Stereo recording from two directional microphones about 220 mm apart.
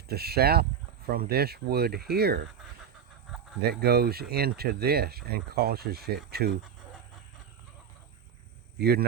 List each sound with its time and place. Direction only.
0.1 s speech: 45° right (ahead or behind)
3.7 s speech: 45° right (ahead or behind)
8.8 s speech: 45° right (ahead or behind)